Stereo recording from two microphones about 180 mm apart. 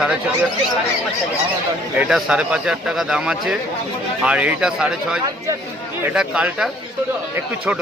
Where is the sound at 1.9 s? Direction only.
5° right (ahead or behind).